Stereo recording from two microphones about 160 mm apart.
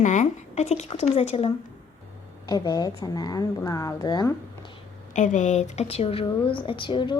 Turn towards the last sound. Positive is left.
turn(degrees=30)  # may be behind; listen again after turning